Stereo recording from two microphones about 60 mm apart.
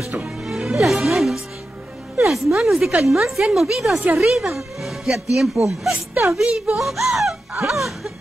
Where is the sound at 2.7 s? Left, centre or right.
Centre.